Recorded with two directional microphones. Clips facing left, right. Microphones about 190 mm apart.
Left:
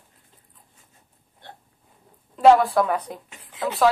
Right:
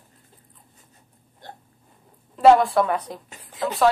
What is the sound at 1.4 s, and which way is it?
Hiccup, 40° right (ahead or behind).